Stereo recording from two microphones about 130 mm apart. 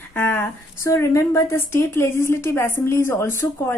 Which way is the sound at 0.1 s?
15° left (ahead or behind).